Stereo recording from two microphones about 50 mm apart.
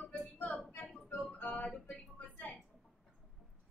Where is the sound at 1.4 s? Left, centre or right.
Left.